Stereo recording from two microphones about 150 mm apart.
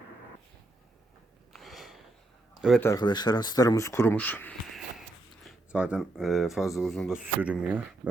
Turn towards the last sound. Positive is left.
turn(degrees=-10)  # may be behind; listen again after turning